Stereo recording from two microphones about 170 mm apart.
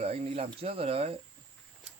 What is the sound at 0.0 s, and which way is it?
Speech, 35° right (ahead or behind).